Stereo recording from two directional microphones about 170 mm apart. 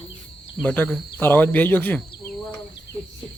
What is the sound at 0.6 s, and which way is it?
Speech, 10° left (ahead or behind).